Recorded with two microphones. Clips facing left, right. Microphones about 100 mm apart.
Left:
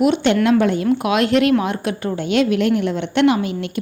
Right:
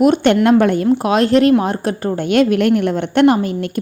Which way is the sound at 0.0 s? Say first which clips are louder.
Right 4 dB; 45° right (ahead or behind).